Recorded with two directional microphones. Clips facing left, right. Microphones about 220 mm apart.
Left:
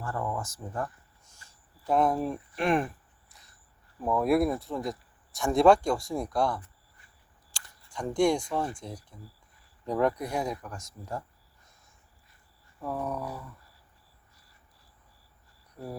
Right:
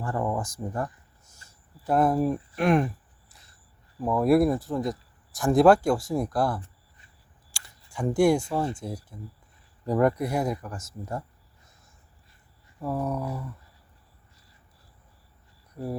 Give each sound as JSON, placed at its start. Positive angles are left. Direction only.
{"t": 0.0, "sound": "speech", "side_deg": -15}
{"t": 0.3, "sound": "a sound", "side_deg": -15}
{"t": 1.9, "sound": "speech", "side_deg": -5}
{"t": 4.0, "sound": "speech", "side_deg": 0}
{"t": 7.5, "sound": "camera", "side_deg": -10}
{"t": 8.8, "sound": "speech", "side_deg": -5}
{"t": 12.8, "sound": "speech", "side_deg": -5}
{"t": 13.2, "sound": "speech", "side_deg": -25}